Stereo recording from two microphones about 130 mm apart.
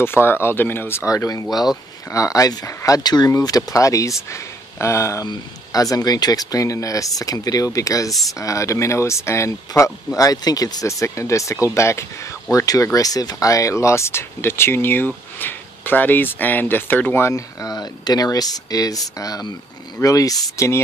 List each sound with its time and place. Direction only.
0.0 s speech: 15° left (ahead or behind)